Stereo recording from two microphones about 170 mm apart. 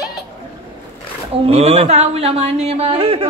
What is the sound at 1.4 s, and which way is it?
Speech, 35° right (ahead or behind).